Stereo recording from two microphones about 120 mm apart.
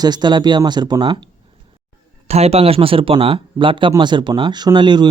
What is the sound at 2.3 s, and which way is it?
Speech, 60° right (ahead or behind).